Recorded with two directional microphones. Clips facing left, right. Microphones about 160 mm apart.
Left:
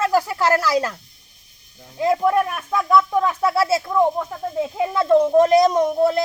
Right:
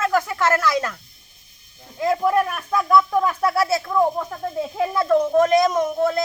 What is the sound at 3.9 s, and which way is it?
Speech, 10° left (ahead or behind).